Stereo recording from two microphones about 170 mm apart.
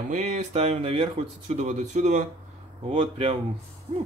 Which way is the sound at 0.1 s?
45° right (ahead or behind).